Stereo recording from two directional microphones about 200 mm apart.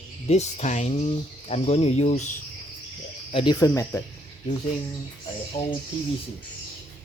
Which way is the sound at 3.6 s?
15° left (ahead or behind).